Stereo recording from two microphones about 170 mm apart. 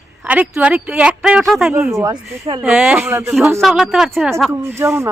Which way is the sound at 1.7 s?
15° right (ahead or behind).